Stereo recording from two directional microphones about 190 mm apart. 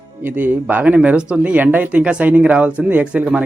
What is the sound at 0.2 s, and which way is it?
Speech, 10° right (ahead or behind).